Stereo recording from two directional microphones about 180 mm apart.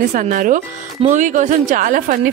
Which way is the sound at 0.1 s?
45° right (ahead or behind).